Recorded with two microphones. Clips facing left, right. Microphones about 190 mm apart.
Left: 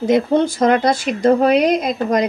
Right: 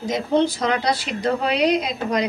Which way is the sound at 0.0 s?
55° left (ahead or behind).